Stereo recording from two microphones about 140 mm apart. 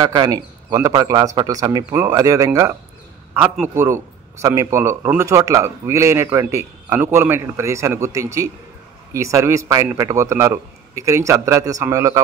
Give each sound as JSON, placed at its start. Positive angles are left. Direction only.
{"t": 0.0, "sound": "a man's voice", "side_deg": -30}